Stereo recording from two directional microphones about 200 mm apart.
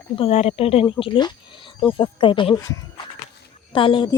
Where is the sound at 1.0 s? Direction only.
25° left (ahead or behind).